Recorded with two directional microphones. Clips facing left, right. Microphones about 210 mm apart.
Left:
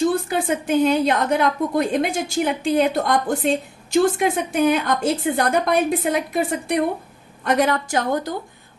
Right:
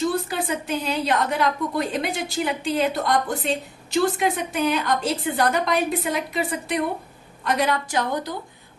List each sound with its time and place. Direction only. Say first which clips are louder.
0.0 s a woman's voice: left 4 dB; 50° left (ahead or behind)
4.5 s a woman's voice: left 4 dB; 45° left (ahead or behind)